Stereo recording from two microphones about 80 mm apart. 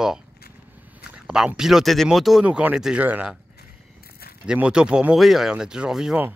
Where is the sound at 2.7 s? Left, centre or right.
Centre.